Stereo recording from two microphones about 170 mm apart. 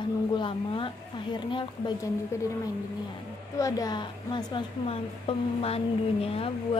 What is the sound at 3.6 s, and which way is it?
Speech, 25° left (ahead or behind).